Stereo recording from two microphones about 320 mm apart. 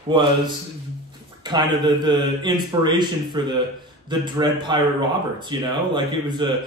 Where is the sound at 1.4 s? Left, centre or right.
Centre.